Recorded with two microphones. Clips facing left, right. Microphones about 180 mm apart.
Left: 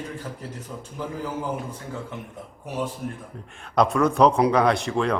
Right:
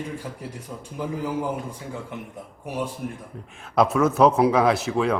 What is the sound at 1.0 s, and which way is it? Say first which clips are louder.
Speech: right 3 dB; 15° right (ahead or behind).